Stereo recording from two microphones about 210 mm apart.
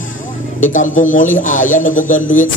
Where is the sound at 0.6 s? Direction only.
40° left (ahead or behind).